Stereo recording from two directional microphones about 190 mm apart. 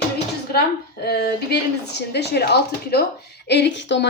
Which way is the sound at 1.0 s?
55° left (ahead or behind).